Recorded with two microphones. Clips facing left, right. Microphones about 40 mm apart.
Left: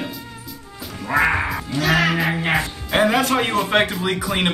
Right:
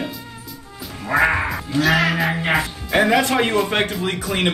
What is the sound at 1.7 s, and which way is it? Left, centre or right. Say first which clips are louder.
Music: right 2 dB; centre.